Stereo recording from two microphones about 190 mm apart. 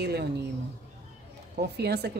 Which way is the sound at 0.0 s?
60° right (ahead or behind).